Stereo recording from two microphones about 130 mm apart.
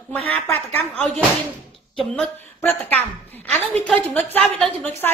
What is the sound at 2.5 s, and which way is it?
A woman's voice, 15° left (ahead or behind).